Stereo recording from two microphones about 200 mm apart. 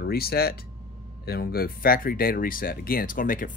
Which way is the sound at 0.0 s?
50° left (ahead or behind).